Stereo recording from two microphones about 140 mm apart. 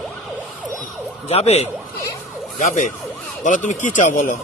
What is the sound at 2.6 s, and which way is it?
Speech, 60° left (ahead or behind).